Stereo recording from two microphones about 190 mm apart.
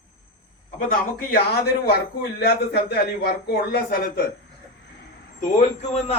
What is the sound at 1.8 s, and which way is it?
Speech, 55° left (ahead or behind).